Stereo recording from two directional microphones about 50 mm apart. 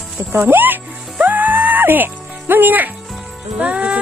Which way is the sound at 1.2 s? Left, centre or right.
Right.